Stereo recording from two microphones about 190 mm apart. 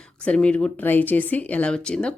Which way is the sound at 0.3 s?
5° left (ahead or behind).